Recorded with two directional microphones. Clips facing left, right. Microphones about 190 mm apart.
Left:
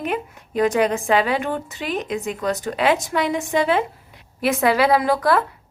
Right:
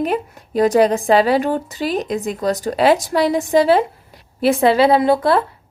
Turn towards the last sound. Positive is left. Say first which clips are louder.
# right 4 dB
turn(degrees=-25)  # may be behind; listen again after turning